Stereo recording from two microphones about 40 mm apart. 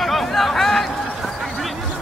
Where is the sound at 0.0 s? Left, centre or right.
Centre.